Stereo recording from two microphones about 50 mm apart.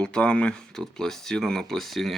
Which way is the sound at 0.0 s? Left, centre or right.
Centre.